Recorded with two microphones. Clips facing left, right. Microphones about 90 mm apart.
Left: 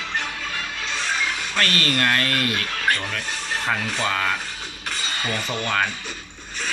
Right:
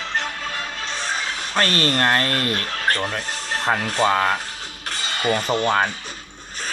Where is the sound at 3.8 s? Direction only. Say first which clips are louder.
Right 5 dB; 45° right (ahead or behind).